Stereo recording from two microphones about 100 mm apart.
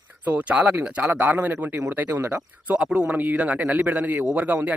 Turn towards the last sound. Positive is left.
turn(degrees=-15)  # may be behind; listen again after turning